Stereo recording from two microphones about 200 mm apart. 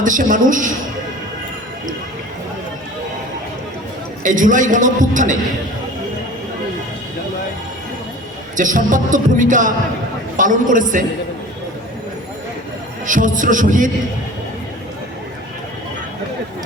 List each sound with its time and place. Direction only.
0.0 s a man's voice: 40° right (ahead or behind)
4.2 s a man's voice: 40° right (ahead or behind)
8.5 s a man's voice: 40° right (ahead or behind)
13.1 s a man's voice: 40° right (ahead or behind)